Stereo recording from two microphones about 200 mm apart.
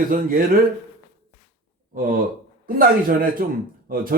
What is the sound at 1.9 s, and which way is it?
A man's voice, 45° right (ahead or behind).